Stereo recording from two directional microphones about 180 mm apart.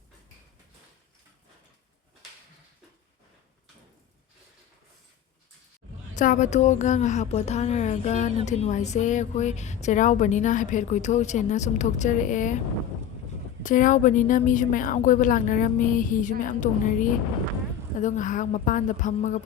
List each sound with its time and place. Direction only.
6.1 s speech: 45° left (ahead or behind)
13.6 s speech: 45° left (ahead or behind)